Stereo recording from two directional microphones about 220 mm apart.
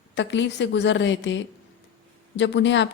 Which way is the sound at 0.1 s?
55° left (ahead or behind).